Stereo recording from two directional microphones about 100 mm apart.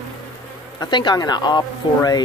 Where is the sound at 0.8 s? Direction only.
50° left (ahead or behind).